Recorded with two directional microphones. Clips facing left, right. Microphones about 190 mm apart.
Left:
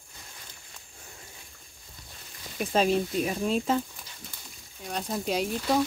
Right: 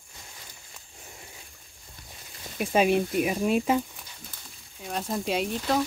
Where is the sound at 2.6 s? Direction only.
10° right (ahead or behind).